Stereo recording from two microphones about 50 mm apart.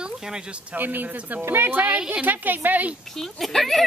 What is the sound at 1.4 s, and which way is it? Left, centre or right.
Speech, right.